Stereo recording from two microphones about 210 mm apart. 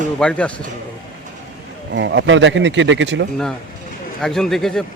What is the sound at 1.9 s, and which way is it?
A man's voice, 60° right (ahead or behind).